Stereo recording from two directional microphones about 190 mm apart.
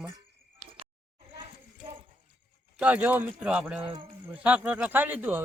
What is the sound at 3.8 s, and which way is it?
Speech, 25° right (ahead or behind).